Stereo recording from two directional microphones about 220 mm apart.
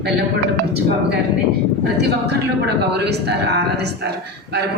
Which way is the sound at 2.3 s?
50° right (ahead or behind).